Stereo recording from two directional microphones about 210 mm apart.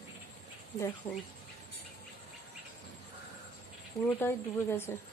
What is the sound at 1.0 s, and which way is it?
Speech, 25° left (ahead or behind).